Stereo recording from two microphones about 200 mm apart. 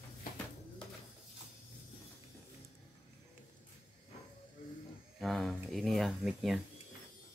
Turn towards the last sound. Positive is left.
turn(degrees=0)  # may be behind; listen again after turning